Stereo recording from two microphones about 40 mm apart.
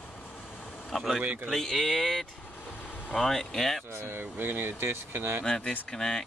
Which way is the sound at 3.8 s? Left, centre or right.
Right.